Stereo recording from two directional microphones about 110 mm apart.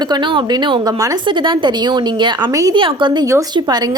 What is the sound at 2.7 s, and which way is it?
A woman's voice, 50° right (ahead or behind).